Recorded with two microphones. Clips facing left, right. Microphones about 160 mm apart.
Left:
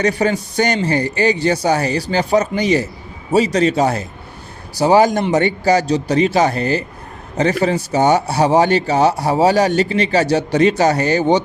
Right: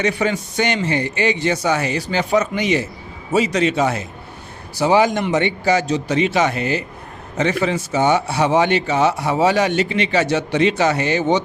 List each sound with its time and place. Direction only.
0.0 s speech: 40° left (ahead or behind)